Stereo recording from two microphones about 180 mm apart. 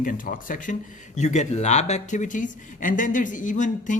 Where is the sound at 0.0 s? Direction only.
50° left (ahead or behind).